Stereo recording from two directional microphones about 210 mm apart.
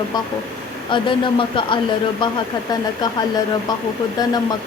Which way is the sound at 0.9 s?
25° left (ahead or behind).